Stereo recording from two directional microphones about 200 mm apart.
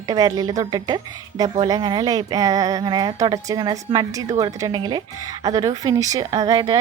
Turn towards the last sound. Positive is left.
turn(degrees=-20)  # may be behind; listen again after turning